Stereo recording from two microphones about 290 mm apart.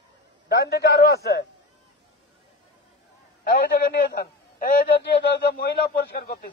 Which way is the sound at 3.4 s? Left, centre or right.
Left.